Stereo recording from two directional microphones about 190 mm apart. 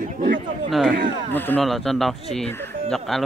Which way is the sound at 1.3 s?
10° left (ahead or behind).